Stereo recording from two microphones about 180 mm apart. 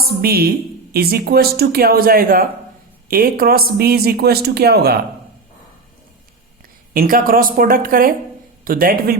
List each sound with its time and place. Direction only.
0.0 s speech: 60° right (ahead or behind)
6.9 s speech: 55° right (ahead or behind)